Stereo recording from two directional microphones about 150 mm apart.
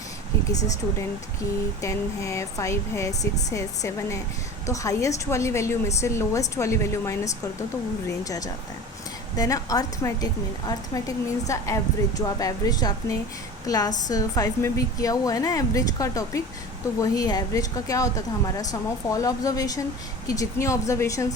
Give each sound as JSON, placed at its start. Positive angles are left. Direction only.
{"t": 1.8, "sound": "a woman's voice", "side_deg": 20}